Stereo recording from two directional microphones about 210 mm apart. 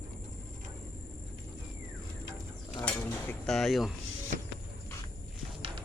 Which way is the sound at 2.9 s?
5° left (ahead or behind).